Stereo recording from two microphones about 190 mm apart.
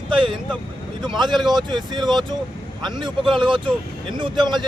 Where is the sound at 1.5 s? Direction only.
25° right (ahead or behind).